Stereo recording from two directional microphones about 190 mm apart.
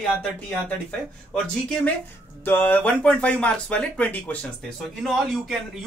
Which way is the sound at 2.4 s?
10° left (ahead or behind).